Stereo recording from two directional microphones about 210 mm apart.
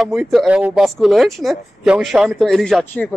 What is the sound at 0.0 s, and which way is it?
A woman's voice, centre (ahead or behind).